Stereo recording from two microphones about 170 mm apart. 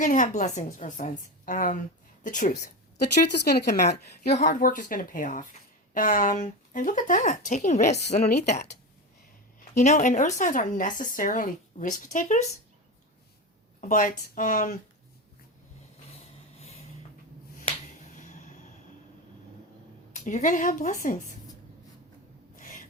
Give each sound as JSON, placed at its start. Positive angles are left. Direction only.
{"t": 0.0, "sound": "speech", "side_deg": 50}
{"t": 3.0, "sound": "a woman's voice", "side_deg": 65}
{"t": 4.3, "sound": "speech", "side_deg": 45}
{"t": 8.0, "sound": "a woman's voice", "side_deg": 65}
{"t": 9.8, "sound": "speech", "side_deg": 45}
{"t": 13.8, "sound": "speech", "side_deg": 55}
{"t": 16.1, "sound": "a sound", "side_deg": 35}
{"t": 18.0, "sound": "a sound", "side_deg": 45}
{"t": 20.1, "sound": "speech", "side_deg": 50}
{"t": 22.5, "sound": "a sound", "side_deg": 50}